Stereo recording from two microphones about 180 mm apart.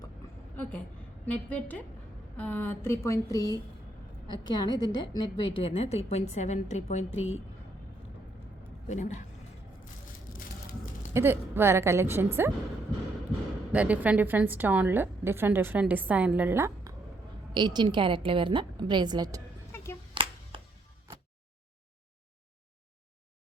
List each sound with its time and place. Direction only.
0.5 s a sound: 10° left (ahead or behind)
1.2 s a woman's voice: 10° left (ahead or behind); by 7.0 s 40° left (ahead or behind)
7.2 s a woman's voice: 90° left
8.9 s a woman's voice: 40° left (ahead or behind)
11.1 s a woman's voice: 10° right (ahead or behind)
13.7 s a woman's voice: 10° right (ahead or behind)
17.5 s a woman's voice: 25° right (ahead or behind)
19.7 s a sound: 15° left (ahead or behind)